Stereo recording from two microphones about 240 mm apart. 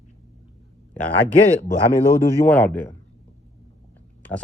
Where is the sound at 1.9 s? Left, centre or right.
Centre.